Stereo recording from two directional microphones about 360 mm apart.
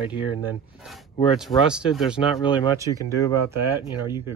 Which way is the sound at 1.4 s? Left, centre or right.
Centre.